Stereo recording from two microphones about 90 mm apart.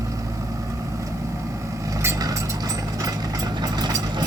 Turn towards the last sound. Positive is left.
turn(degrees=-50)  # may be behind; listen again after turning